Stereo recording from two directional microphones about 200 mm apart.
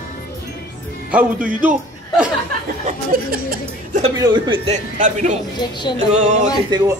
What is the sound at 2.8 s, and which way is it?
Speech, 45° right (ahead or behind).